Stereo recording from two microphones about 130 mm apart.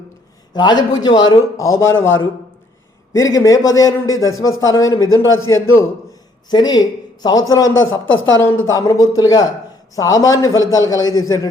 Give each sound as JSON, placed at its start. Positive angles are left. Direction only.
{"t": 0.5, "sound": "a man's voice", "side_deg": 35}
{"t": 3.1, "sound": "a man's voice", "side_deg": 25}